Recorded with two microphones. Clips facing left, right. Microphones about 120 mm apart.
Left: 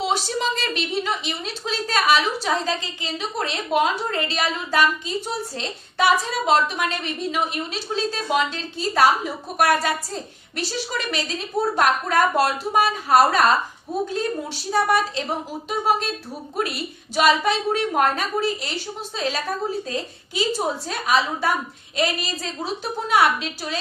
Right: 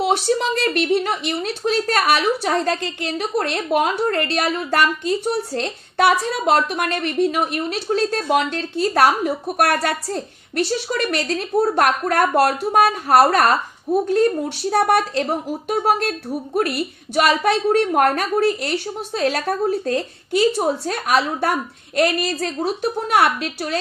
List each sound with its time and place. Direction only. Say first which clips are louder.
0.0 s a woman's voice: right 5 dB; 55° right (ahead or behind)